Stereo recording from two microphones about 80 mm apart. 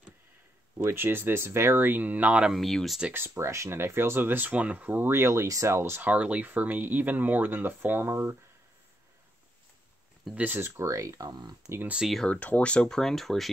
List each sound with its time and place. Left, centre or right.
0.8 s speech: right
2.4 s speech: centre
3.1 s speech: right
6.0 s speech: centre
10.3 s speech: right
10.8 s speech: right
11.2 s speech: right
12.3 s speech: centre